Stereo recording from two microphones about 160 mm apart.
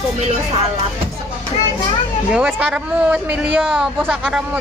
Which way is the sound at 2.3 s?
5° right (ahead or behind).